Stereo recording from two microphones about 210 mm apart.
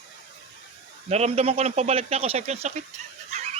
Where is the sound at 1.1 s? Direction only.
30° right (ahead or behind).